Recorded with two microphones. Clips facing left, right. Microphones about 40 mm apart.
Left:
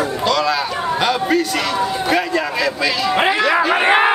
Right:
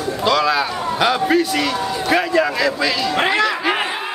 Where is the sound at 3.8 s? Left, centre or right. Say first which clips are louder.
Left 9 dB; left.